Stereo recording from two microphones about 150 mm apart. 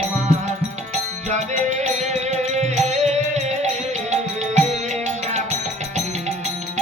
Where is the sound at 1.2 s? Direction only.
50° right (ahead or behind).